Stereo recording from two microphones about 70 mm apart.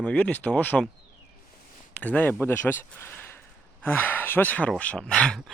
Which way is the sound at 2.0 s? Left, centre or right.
Left.